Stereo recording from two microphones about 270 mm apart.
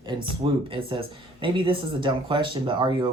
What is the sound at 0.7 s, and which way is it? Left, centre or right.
Speech, centre.